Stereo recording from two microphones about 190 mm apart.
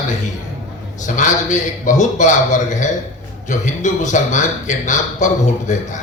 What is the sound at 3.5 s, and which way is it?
Speech, 40° left (ahead or behind).